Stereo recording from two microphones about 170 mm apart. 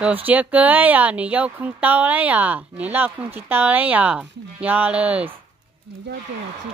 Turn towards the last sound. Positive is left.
turn(degrees=-10)  # may be behind; listen again after turning